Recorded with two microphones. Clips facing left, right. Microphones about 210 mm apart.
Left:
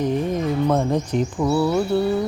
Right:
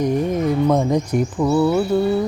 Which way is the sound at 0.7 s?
10° right (ahead or behind).